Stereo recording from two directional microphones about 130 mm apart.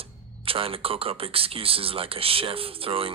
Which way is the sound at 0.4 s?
45° right (ahead or behind).